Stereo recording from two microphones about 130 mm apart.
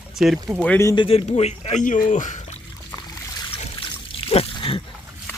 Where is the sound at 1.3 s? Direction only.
55° left (ahead or behind).